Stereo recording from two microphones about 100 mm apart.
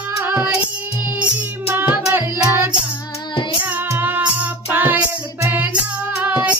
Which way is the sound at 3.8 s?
20° right (ahead or behind).